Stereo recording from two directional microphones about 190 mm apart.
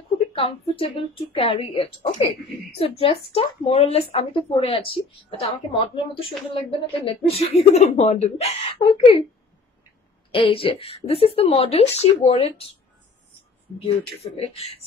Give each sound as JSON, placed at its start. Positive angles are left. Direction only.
{"t": 0.3, "sound": "speech", "side_deg": 30}
{"t": 10.3, "sound": "speech", "side_deg": 30}
{"t": 14.2, "sound": "speech", "side_deg": 30}